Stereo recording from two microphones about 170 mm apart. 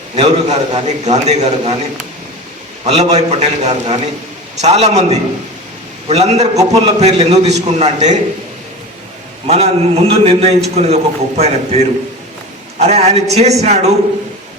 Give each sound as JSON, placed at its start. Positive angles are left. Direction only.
{"t": 0.2, "sound": "a man's voice", "side_deg": -40}
{"t": 2.8, "sound": "a man's voice", "side_deg": -40}
{"t": 9.5, "sound": "a man's voice", "side_deg": -35}
{"t": 12.8, "sound": "a man's voice", "side_deg": -40}